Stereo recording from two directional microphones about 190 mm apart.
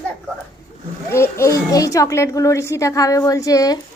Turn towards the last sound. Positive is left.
turn(degrees=20)  # may be behind; listen again after turning